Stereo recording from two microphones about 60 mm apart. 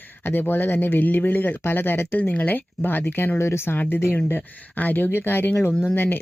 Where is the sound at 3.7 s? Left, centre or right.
Left.